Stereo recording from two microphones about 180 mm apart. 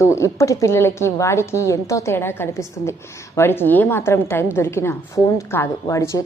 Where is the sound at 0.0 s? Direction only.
15° left (ahead or behind).